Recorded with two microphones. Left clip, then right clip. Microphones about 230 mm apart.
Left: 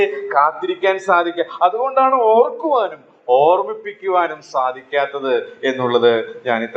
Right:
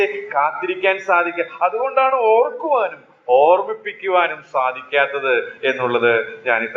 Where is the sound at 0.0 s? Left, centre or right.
Left.